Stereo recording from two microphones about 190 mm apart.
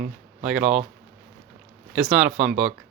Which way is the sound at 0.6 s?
35° right (ahead or behind).